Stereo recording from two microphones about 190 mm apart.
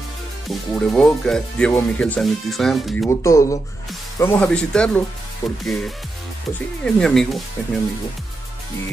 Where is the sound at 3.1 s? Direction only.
15° left (ahead or behind).